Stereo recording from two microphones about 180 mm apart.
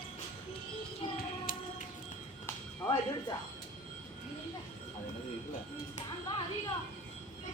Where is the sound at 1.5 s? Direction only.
50° left (ahead or behind).